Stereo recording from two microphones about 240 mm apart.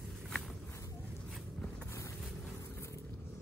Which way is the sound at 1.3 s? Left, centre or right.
Centre.